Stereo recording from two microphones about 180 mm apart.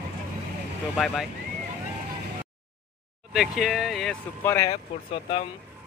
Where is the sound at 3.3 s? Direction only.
Centre (ahead or behind).